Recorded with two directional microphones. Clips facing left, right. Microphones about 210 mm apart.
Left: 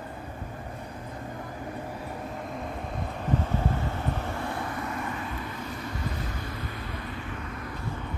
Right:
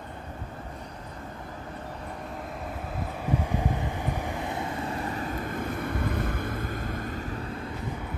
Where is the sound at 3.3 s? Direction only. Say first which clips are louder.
Even; 15° right (ahead or behind); by 7.7 s 30° right (ahead or behind).